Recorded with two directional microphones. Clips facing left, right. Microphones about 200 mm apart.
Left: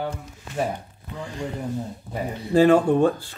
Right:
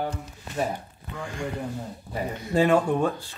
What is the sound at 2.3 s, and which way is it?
Speech, 30° left (ahead or behind).